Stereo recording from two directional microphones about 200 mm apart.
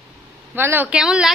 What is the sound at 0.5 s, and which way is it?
Speech, 10° right (ahead or behind).